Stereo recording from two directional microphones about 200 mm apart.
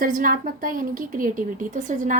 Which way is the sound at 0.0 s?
45° right (ahead or behind).